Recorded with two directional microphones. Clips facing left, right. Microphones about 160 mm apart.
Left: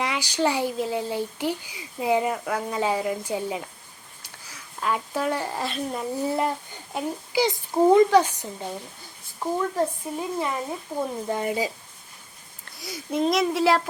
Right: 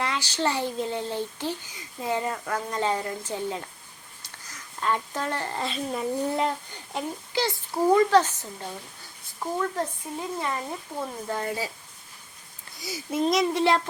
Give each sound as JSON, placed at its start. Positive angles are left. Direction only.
{"t": 0.0, "sound": "a woman's voice", "side_deg": 15}
{"t": 6.9, "sound": "speech", "side_deg": 15}
{"t": 12.8, "sound": "speech", "side_deg": -5}